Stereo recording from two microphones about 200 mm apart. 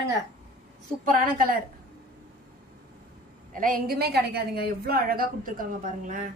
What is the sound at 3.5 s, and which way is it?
A woman's voice, 45° right (ahead or behind).